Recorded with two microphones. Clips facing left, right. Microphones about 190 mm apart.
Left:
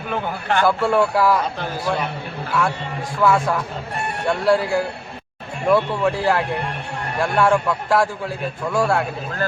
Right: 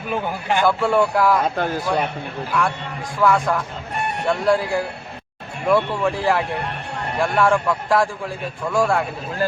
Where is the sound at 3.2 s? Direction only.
5° left (ahead or behind).